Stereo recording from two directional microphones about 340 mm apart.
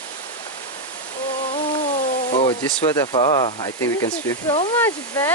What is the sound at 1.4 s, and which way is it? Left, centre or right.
Speech, centre.